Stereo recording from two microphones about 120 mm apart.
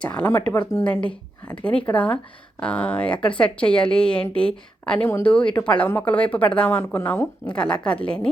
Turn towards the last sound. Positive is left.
turn(degrees=10)  # may be behind; listen again after turning